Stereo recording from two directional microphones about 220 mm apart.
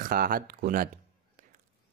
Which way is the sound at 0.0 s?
40° right (ahead or behind).